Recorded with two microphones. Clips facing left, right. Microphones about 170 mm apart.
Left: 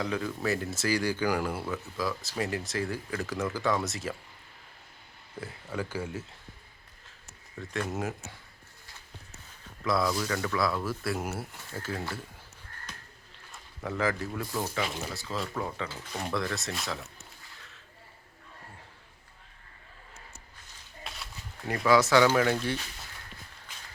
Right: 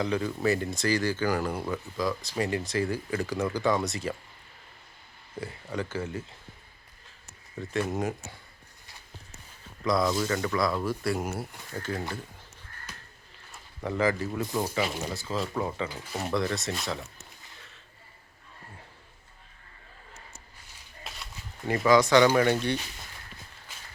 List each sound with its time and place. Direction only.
0.0 s speech: centre (ahead or behind)
5.4 s speech: 5° left (ahead or behind)
7.6 s speech: centre (ahead or behind)
10.0 s speech: 20° right (ahead or behind)
10.2 s speech: centre (ahead or behind)
13.8 s speech: centre (ahead or behind)
21.0 s a sound: centre (ahead or behind)
21.7 s speech: centre (ahead or behind)